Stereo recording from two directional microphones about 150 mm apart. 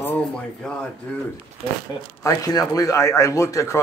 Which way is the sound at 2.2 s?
25° left (ahead or behind).